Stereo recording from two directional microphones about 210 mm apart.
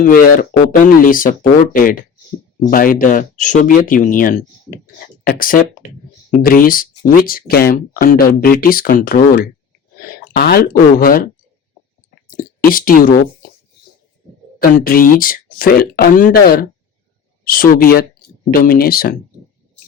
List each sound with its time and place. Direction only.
0.0 s speech: 40° left (ahead or behind)
12.3 s speech: 40° left (ahead or behind)
14.6 s speech: 45° left (ahead or behind)